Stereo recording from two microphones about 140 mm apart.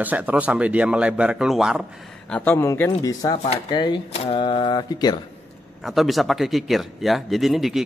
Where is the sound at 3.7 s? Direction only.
30° left (ahead or behind).